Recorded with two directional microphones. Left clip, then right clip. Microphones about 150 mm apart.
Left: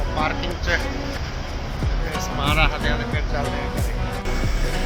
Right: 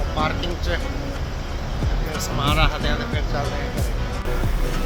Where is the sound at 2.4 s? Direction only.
20° right (ahead or behind).